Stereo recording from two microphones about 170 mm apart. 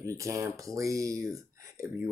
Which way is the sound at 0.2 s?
20° right (ahead or behind).